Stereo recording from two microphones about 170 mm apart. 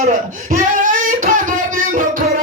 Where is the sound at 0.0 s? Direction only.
50° right (ahead or behind).